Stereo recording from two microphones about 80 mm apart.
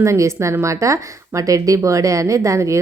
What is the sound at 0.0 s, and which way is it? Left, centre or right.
A woman's voice, right.